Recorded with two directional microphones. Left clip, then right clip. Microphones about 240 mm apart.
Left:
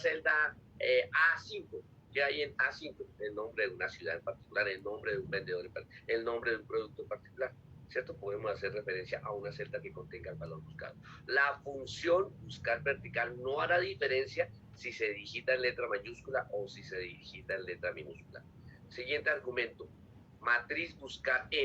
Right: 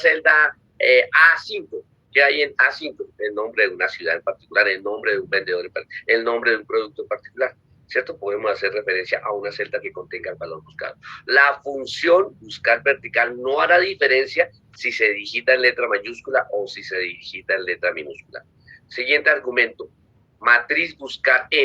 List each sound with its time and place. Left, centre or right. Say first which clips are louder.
0.0 s a man's voice: right 16 dB; right